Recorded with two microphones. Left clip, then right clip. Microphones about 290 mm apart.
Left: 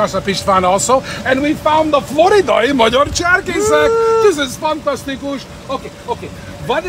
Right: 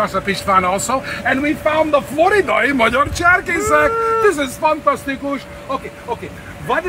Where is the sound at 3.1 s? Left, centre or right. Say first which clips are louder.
Even; centre.